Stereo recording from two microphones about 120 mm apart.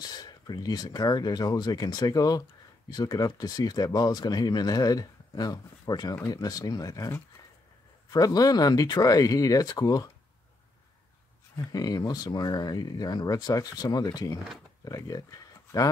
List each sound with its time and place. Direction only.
0.0 s speech: 35° left (ahead or behind)
11.5 s speech: 30° left (ahead or behind)